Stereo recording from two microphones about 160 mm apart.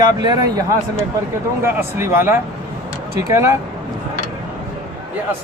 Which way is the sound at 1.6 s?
15° right (ahead or behind).